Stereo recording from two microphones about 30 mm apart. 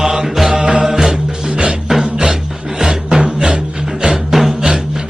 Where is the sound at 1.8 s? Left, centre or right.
Centre.